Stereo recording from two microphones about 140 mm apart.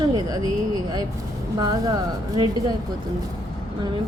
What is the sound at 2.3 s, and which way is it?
Speech, 30° right (ahead or behind).